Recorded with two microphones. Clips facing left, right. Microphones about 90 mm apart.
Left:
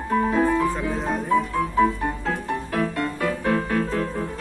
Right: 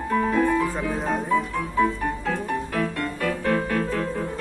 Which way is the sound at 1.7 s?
15° left (ahead or behind).